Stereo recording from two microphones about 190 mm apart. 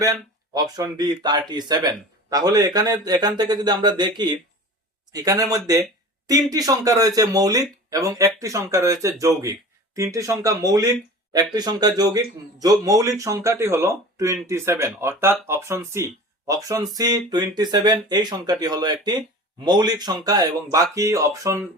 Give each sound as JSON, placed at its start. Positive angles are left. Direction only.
{"t": 0.0, "sound": "speech", "side_deg": -20}